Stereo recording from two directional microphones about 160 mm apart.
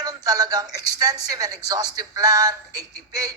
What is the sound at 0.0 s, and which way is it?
Speech, 25° right (ahead or behind).